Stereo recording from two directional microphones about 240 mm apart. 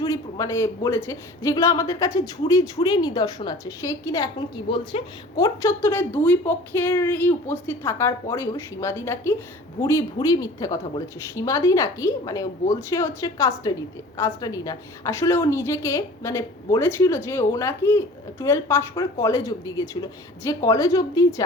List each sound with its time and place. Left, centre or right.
0.0 s speech: centre